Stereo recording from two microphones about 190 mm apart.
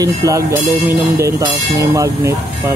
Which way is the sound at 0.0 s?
20° right (ahead or behind).